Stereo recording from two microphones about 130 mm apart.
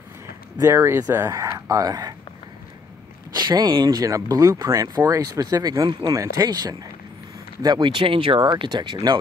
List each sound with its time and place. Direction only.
0.6 s speech: 20° right (ahead or behind)
3.3 s speech: 30° right (ahead or behind)